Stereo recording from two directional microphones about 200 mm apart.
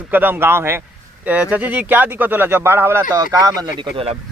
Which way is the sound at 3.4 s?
25° right (ahead or behind).